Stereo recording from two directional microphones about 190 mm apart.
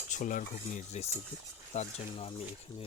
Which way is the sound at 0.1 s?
40° left (ahead or behind).